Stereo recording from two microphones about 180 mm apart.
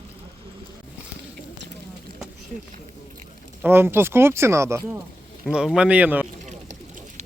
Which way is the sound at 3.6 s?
10° right (ahead or behind).